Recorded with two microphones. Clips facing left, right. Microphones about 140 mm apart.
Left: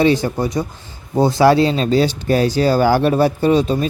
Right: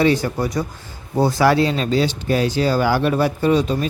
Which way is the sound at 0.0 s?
25° left (ahead or behind).